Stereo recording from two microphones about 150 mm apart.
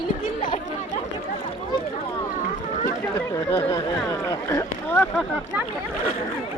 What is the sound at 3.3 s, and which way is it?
Speech, 20° left (ahead or behind).